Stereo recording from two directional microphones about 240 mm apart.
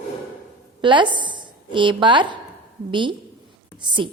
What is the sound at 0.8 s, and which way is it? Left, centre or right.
A woman's voice, centre.